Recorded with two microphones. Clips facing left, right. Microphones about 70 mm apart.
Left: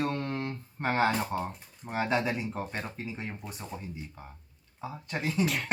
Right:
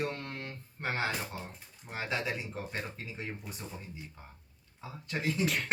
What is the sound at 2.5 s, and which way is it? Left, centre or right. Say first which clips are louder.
Speech: left 4 dB; left.